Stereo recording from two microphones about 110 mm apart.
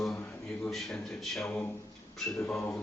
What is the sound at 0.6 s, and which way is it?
Speech, 5° left (ahead or behind).